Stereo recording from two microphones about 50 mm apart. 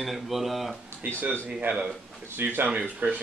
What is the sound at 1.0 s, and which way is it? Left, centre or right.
Speech, right.